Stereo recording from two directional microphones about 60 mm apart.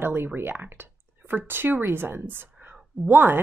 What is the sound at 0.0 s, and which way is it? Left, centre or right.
Speech, right.